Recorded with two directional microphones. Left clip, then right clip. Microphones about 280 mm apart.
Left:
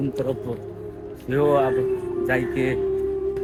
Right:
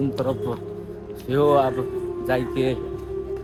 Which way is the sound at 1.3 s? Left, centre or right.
Centre.